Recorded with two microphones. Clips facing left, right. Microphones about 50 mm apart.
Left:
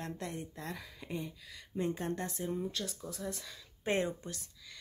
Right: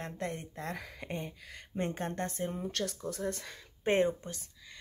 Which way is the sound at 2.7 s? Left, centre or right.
Right.